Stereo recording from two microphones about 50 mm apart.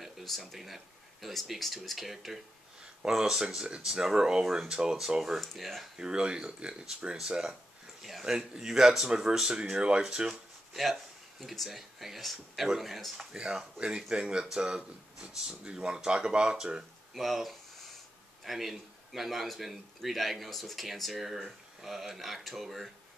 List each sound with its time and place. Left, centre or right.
0.0 s a man's voice: centre
5.4 s a man's voice: centre
5.9 s speech: centre
10.2 s a man's voice: centre
13.3 s speech: centre
17.1 s a man's voice: centre